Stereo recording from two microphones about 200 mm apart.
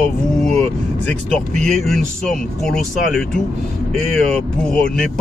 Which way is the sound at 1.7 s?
Centre (ahead or behind).